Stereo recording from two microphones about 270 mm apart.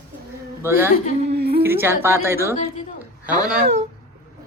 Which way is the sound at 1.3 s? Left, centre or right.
Right.